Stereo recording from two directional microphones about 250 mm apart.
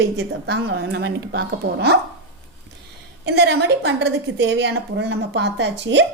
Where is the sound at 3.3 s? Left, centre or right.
Right.